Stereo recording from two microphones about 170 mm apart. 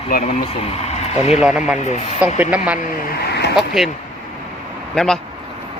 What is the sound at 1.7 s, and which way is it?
Speech, 40° left (ahead or behind).